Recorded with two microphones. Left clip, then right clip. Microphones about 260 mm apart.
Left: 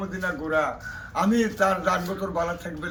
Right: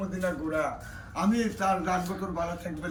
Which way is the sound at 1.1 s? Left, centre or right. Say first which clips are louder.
Left 5 dB; centre.